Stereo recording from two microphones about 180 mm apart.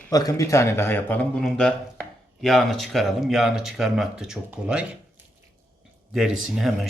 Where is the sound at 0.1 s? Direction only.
20° left (ahead or behind); by 4.9 s 5° right (ahead or behind).